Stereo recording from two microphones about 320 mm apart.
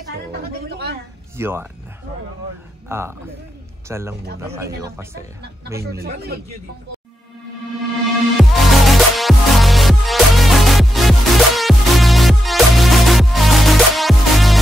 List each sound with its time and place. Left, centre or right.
0.3 s a sound: right
1.3 s speech: centre
2.9 s speech: centre
5.9 s speech: right
8.4 s music: centre